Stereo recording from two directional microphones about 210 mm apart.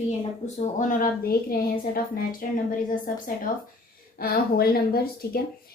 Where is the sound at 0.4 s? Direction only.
35° left (ahead or behind).